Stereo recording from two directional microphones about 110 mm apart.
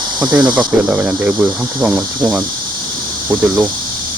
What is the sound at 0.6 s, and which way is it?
Speech, 10° right (ahead or behind).